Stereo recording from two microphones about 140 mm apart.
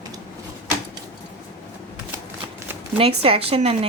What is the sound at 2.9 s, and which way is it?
Speech, 45° right (ahead or behind).